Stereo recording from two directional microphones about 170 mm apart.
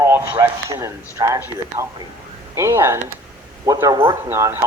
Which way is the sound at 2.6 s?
15° right (ahead or behind).